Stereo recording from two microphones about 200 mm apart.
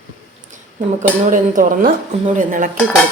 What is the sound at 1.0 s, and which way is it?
A woman's voice, 40° right (ahead or behind).